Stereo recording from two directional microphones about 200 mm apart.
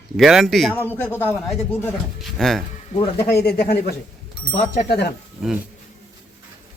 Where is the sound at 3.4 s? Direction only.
50° left (ahead or behind).